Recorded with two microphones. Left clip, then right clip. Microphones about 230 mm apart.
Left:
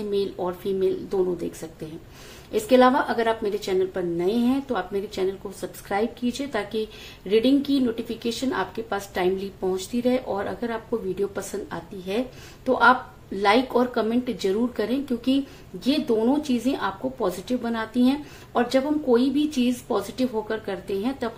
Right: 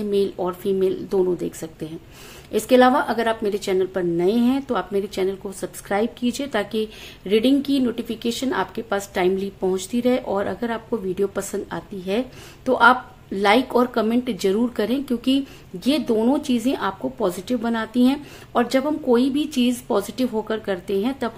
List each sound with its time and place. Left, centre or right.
0.1 s a woman's voice: right